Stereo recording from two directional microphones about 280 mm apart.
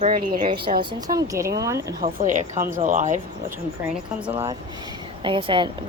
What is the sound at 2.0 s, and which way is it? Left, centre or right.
Speech, right.